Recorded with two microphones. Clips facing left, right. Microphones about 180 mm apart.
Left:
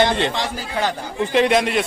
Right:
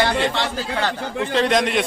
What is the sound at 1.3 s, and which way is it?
Speech, 10° left (ahead or behind).